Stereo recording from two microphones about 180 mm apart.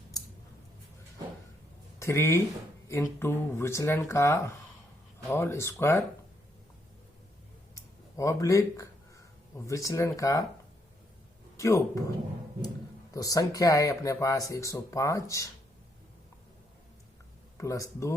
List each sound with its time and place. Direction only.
2.0 s speech: 15° left (ahead or behind)
8.1 s speech: 15° left (ahead or behind)
11.5 s speech: 15° left (ahead or behind)
13.1 s speech: 20° left (ahead or behind)
17.6 s speech: 15° left (ahead or behind)